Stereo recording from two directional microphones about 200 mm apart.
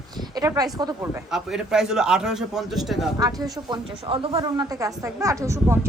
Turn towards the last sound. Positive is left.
turn(degrees=-15)  # may be behind; listen again after turning